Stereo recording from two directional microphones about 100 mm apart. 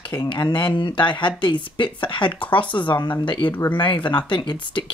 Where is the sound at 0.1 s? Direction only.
45° left (ahead or behind).